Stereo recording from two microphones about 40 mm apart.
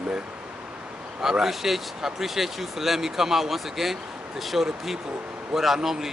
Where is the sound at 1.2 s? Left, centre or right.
Centre.